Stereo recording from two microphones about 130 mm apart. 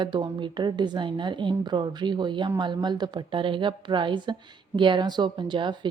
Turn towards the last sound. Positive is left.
turn(degrees=-35)  # may be behind; listen again after turning